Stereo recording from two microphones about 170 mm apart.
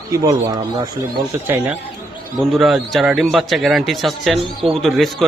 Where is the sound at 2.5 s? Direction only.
Centre (ahead or behind).